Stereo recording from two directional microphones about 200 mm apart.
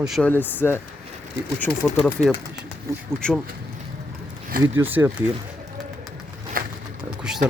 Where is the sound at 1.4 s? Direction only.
60° left (ahead or behind).